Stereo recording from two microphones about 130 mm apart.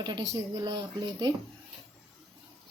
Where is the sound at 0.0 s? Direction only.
35° right (ahead or behind).